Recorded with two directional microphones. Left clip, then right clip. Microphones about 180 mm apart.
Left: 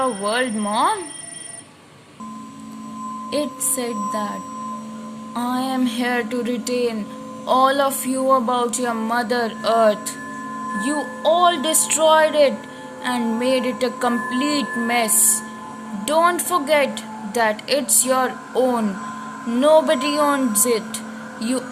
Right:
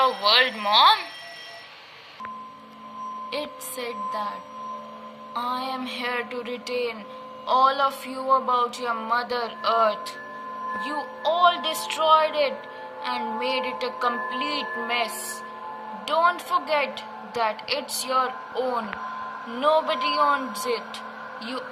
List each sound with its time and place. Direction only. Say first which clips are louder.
0.0 s speech: right 2 dB; 30° left (ahead or behind)
3.2 s a woman's voice: left 7 dB; 30° left (ahead or behind)